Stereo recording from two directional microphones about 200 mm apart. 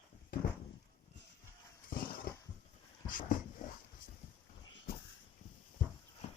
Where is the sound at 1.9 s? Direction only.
45° left (ahead or behind).